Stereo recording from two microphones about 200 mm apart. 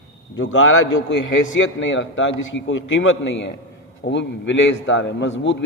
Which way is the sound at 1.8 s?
70° left (ahead or behind).